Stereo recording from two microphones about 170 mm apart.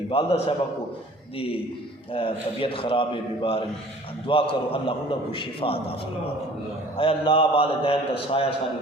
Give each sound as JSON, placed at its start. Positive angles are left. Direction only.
{"t": 0.1, "sound": "a man's voice", "side_deg": 35}
{"t": 2.1, "sound": "a man's voice", "side_deg": 30}